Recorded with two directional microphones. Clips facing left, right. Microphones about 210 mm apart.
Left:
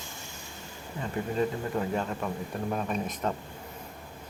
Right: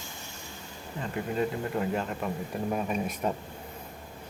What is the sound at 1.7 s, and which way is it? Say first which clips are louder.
Speech: even; 5° right (ahead or behind).